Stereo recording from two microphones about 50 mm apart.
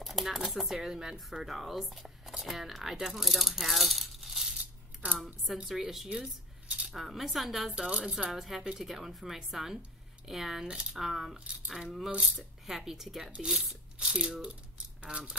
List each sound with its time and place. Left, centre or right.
0.0 s speech: centre
5.0 s speech: right
5.7 s speech: centre
7.8 s speech: centre
8.3 s speech: centre
11.3 s speech: right
12.2 s speech: centre
13.9 s speech: centre